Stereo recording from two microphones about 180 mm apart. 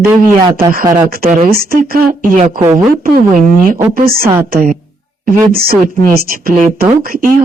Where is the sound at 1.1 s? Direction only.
50° right (ahead or behind).